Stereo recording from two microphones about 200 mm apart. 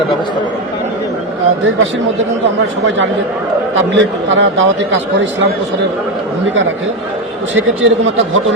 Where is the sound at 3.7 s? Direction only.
70° right (ahead or behind).